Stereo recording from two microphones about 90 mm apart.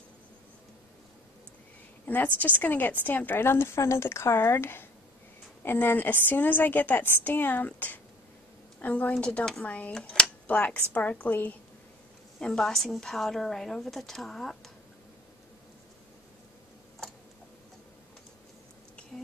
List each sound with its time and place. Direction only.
2.0 s a woman's voice: 20° left (ahead or behind)
12.4 s a woman's voice: 10° left (ahead or behind)